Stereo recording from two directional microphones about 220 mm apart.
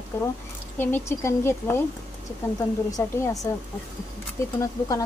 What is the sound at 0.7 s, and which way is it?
Speech, 10° left (ahead or behind).